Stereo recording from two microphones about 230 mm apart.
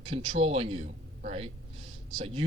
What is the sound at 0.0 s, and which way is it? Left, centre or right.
A man's voice, right.